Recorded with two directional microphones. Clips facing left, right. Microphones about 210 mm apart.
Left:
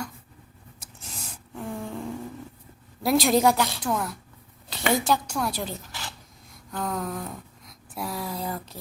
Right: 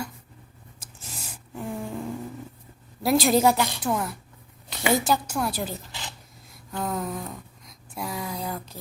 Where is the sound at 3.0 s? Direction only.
Centre (ahead or behind).